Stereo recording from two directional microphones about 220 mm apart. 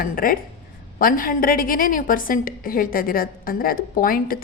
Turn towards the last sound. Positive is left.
turn(degrees=40)  # may be behind; listen again after turning